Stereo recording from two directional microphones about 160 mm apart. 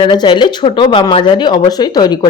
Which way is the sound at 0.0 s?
30° left (ahead or behind).